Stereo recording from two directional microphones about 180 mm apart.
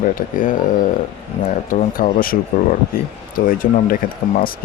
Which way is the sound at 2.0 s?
50° left (ahead or behind).